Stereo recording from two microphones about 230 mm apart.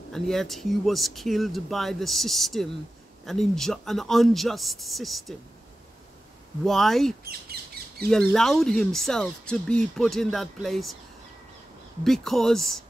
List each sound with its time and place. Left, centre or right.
0.1 s speech: centre
6.6 s speech: centre
7.8 s a sound: right
8.1 s speech: centre
12.0 s speech: centre